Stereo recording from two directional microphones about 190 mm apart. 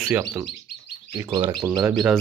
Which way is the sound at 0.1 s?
15° right (ahead or behind).